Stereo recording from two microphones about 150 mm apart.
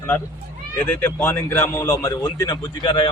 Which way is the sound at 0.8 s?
10° left (ahead or behind).